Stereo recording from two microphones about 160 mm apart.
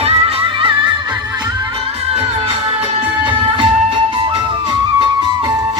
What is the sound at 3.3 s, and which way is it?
Music, 30° right (ahead or behind).